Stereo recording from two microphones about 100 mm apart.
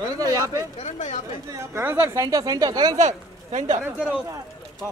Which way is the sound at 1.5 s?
25° right (ahead or behind).